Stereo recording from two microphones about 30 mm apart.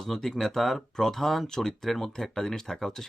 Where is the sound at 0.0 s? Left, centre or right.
Centre.